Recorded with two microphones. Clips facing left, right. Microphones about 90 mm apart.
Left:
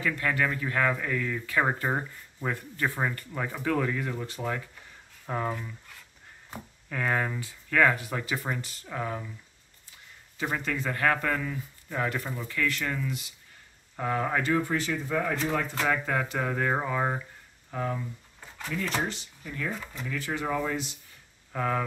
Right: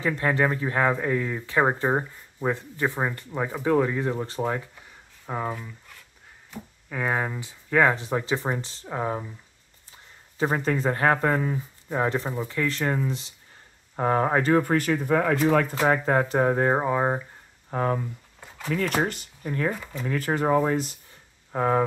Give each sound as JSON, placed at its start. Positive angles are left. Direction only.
{"t": 0.0, "sound": "speech", "side_deg": -30}
{"t": 5.2, "sound": "speech", "side_deg": -10}
{"t": 6.9, "sound": "speech", "side_deg": -15}
{"t": 10.3, "sound": "speech", "side_deg": -35}
{"t": 14.6, "sound": "speech", "side_deg": -60}
{"t": 15.8, "sound": "speech", "side_deg": -40}
{"t": 17.6, "sound": "speech", "side_deg": -50}
{"t": 21.5, "sound": "speech", "side_deg": -30}